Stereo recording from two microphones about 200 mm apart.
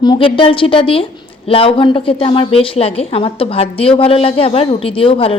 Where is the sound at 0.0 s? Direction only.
25° left (ahead or behind).